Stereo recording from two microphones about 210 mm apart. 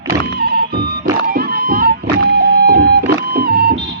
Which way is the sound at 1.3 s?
45° right (ahead or behind).